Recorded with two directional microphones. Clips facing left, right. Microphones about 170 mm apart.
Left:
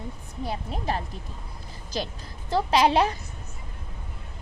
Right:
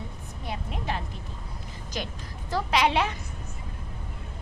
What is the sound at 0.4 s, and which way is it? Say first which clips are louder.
A woman's voice: left 3 dB; 35° left (ahead or behind).